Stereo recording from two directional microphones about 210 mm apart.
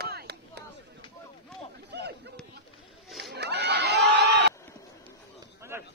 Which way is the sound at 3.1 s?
Centre (ahead or behind).